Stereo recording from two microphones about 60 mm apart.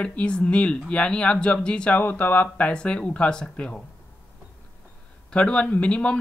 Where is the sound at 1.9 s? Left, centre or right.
Left.